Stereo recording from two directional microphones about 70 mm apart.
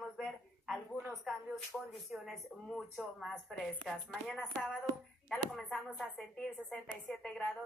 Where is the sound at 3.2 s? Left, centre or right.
Centre.